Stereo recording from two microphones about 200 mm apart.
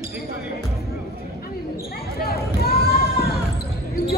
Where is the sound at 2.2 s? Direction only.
50° left (ahead or behind).